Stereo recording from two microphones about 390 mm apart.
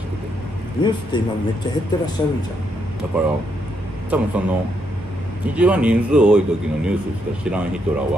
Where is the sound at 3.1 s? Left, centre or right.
Centre.